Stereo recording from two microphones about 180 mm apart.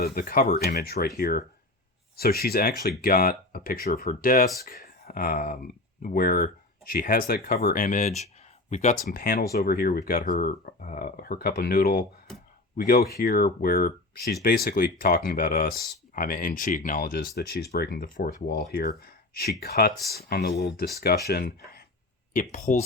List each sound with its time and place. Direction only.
0.0 s speech: 55° left (ahead or behind)
9.0 s speech: 50° left (ahead or behind)
22.5 s speech: 45° left (ahead or behind)